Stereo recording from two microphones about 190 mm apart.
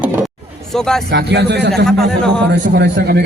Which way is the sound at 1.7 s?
5° left (ahead or behind).